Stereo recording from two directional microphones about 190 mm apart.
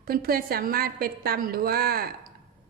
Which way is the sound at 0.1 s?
50° right (ahead or behind).